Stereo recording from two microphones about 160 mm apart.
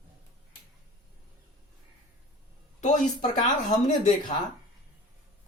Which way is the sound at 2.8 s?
50° left (ahead or behind).